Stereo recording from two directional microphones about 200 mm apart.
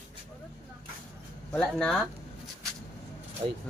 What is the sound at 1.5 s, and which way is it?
Speech, 5° left (ahead or behind).